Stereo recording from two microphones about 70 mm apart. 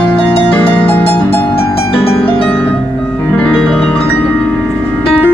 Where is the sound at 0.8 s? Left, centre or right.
Left.